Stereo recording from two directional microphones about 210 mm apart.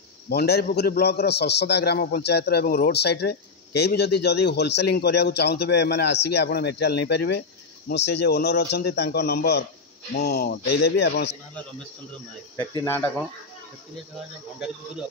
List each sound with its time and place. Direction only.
0.3 s a man's voice: 50° left (ahead or behind)
12.5 s speech: 15° left (ahead or behind)